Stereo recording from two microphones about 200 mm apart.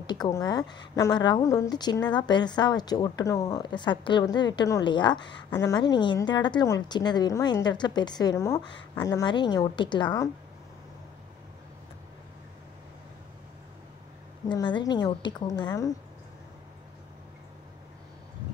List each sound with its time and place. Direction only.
0.0 s a woman's voice: 20° left (ahead or behind)
14.5 s a woman's voice: 20° left (ahead or behind)